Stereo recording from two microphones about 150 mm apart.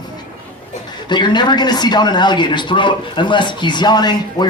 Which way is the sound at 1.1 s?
30° left (ahead or behind).